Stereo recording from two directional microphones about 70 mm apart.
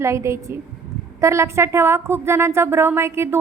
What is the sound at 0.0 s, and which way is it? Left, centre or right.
A woman's voice, right.